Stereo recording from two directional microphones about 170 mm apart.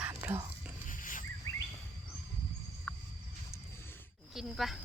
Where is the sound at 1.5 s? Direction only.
20° left (ahead or behind).